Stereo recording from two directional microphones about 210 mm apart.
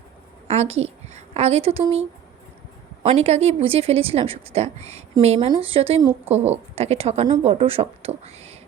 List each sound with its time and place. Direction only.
0.4 s a woman's voice: 30° right (ahead or behind)